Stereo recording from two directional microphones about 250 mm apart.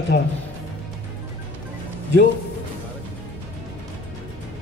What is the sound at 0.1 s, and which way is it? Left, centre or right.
Speech, left.